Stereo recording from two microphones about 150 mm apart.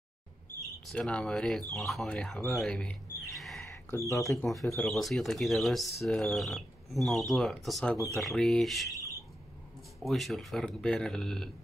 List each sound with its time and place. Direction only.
0.8 s speech: 5° left (ahead or behind)
4.1 s speech: 20° left (ahead or behind)
4.5 s speech: centre (ahead or behind)
9.9 s speech: centre (ahead or behind)